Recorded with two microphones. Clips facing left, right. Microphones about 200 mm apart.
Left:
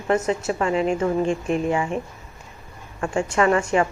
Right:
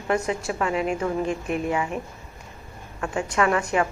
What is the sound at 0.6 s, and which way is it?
Speech, 5° right (ahead or behind).